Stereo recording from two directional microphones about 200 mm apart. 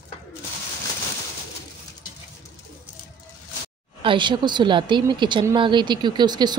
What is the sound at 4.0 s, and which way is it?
Speech, 25° right (ahead or behind).